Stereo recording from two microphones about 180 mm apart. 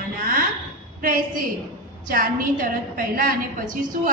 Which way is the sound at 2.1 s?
50° right (ahead or behind).